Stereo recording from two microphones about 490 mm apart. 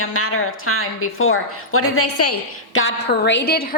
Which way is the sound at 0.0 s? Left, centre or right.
Left.